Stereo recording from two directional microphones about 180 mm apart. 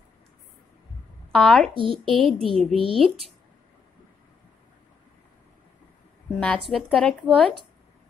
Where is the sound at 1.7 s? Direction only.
30° right (ahead or behind).